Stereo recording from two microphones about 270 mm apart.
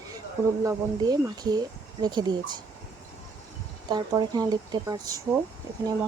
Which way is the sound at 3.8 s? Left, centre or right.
Centre.